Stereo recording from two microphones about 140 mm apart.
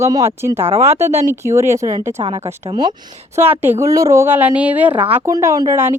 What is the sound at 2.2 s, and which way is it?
Speech, 35° right (ahead or behind).